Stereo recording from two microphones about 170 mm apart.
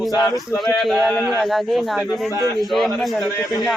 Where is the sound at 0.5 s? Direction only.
Centre (ahead or behind).